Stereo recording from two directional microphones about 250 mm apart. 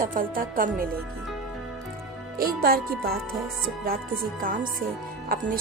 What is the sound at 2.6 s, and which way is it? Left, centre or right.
Speech, right.